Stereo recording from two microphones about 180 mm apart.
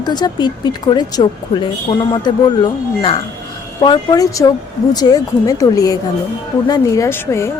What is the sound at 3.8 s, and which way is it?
A woman's voice, 20° left (ahead or behind).